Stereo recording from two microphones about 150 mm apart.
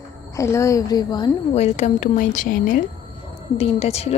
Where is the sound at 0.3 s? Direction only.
20° left (ahead or behind).